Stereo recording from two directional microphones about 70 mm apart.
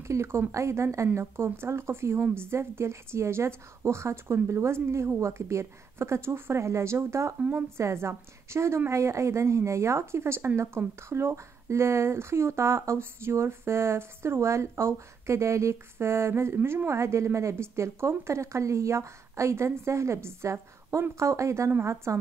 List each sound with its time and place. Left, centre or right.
0.0 s a woman's voice: right